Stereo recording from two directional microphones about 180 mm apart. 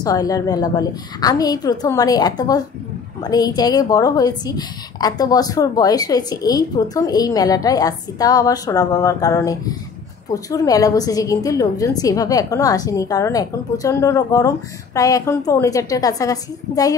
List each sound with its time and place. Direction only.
0.0 s a woman's voice: 20° left (ahead or behind)